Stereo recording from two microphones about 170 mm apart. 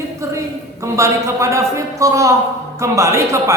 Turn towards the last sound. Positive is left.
turn(degrees=-15)  # may be behind; listen again after turning